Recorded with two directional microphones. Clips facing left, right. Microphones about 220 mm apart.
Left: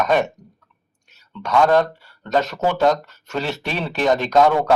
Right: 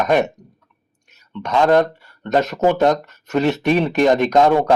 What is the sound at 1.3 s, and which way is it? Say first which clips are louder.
A man's voice: right 1 dB; 20° right (ahead or behind).